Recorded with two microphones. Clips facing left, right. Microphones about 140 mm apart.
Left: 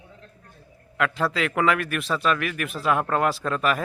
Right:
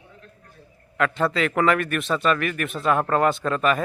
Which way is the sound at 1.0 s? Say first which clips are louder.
Right 2 dB; centre (ahead or behind).